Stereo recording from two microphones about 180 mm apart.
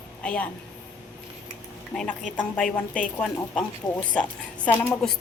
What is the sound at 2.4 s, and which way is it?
A woman's voice, 5° left (ahead or behind).